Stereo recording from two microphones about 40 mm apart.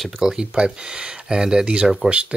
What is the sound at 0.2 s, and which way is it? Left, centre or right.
Speech, centre.